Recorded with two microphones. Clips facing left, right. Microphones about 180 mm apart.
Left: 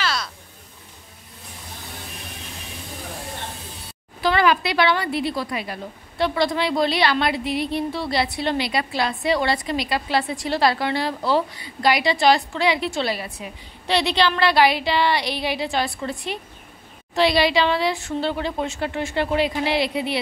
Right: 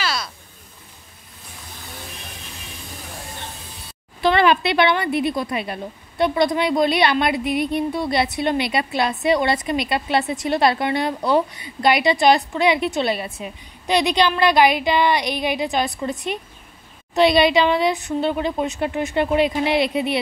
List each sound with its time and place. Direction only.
0.0 s a sound: 10° right (ahead or behind)
4.2 s a woman's voice: 25° right (ahead or behind)
7.3 s a woman's voice: 25° left (ahead or behind)
7.7 s a woman's voice: 20° right (ahead or behind)